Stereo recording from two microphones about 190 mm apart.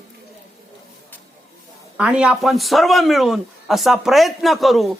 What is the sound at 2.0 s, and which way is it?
Speech, 5° right (ahead or behind).